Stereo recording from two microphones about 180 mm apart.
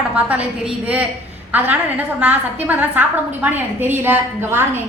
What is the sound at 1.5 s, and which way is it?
A woman's voice, 10° right (ahead or behind).